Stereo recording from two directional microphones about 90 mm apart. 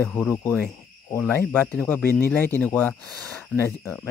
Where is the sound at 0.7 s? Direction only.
35° left (ahead or behind).